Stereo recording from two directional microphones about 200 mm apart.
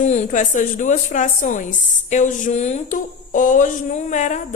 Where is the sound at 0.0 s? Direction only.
35° left (ahead or behind).